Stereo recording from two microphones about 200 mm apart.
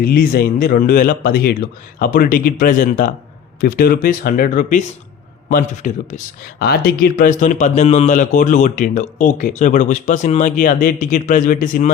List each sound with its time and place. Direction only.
0.0 s speech: 50° left (ahead or behind)